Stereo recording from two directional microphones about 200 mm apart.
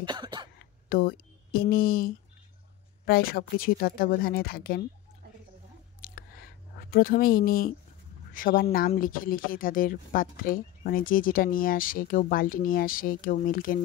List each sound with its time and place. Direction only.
0.0 s throat clearing: 20° right (ahead or behind)
0.8 s speech: 45° left (ahead or behind)
5.9 s a sound: 45° left (ahead or behind)
8.3 s speech: 45° left (ahead or behind)